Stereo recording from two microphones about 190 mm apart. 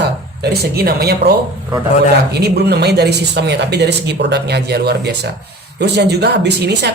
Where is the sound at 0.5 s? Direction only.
55° right (ahead or behind).